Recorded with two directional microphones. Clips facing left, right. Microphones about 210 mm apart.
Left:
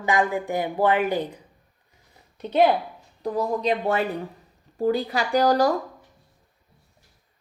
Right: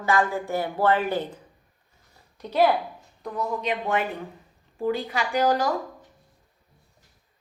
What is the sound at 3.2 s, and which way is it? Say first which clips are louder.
Speech: left 5 dB; 35° left (ahead or behind).